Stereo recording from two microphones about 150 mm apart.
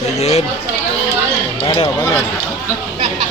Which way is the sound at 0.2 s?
45° left (ahead or behind).